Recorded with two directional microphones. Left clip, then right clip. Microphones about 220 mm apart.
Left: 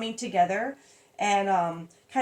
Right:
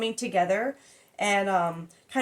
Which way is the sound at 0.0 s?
25° right (ahead or behind).